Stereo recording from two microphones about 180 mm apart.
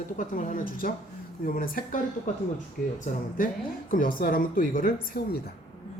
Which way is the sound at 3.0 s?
50° left (ahead or behind).